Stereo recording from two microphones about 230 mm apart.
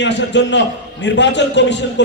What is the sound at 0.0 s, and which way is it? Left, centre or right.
A man's voice, left.